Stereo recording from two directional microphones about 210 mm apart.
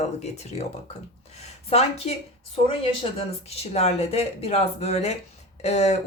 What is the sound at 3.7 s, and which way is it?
Speech, 30° left (ahead or behind).